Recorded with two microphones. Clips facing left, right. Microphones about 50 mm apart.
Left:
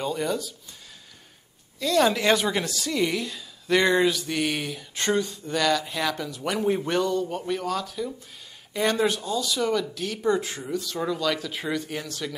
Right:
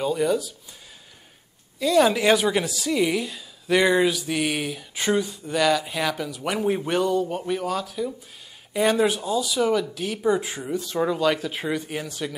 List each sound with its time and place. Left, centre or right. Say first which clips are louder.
0.0 s speech: right 5 dB; centre
1.8 s speech: right 3 dB; centre